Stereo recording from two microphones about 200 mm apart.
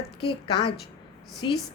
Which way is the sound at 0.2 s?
25° left (ahead or behind).